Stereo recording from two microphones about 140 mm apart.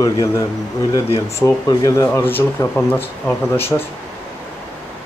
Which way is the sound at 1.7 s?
25° left (ahead or behind).